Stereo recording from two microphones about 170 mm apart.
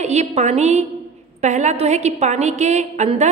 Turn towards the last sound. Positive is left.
turn(degrees=-40)  # may be behind; listen again after turning